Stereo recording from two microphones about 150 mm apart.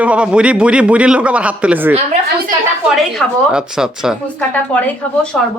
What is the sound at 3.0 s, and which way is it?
A woman's voice, 5° right (ahead or behind).